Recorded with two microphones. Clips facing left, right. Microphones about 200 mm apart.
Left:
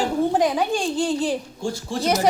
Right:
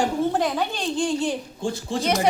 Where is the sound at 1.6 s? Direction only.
20° right (ahead or behind).